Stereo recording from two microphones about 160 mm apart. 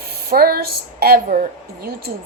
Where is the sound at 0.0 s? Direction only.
75° right (ahead or behind).